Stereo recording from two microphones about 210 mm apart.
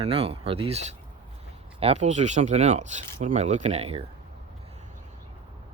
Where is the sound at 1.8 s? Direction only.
30° right (ahead or behind).